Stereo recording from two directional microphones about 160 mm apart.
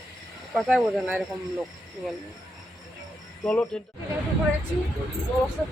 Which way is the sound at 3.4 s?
5° left (ahead or behind).